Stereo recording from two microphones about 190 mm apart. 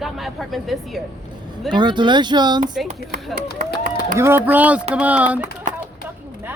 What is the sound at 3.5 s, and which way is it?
Speech, 50° right (ahead or behind).